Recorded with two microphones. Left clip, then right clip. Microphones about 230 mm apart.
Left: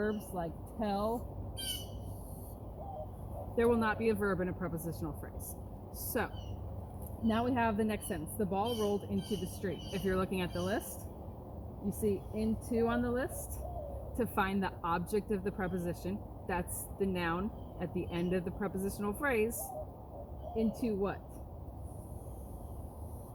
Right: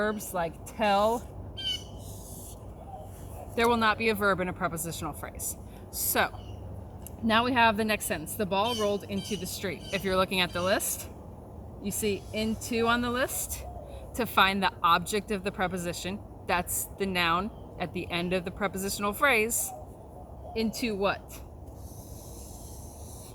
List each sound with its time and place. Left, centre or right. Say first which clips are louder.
0.0 s a woman's voice: right 7 dB; right
3.5 s a woman's voice: right 6 dB; centre
7.3 s a woman's voice: right 9 dB; centre
12.0 s a woman's voice: right 4 dB; centre
20.6 s a woman's voice: right 5 dB; centre